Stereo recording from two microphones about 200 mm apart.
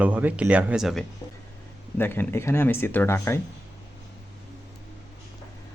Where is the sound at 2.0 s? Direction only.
10° left (ahead or behind).